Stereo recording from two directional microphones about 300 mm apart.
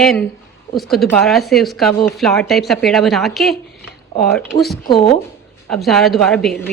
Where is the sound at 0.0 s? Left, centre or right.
Centre.